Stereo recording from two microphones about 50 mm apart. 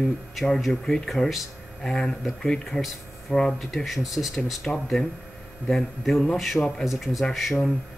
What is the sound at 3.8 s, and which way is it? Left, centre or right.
Speech, centre.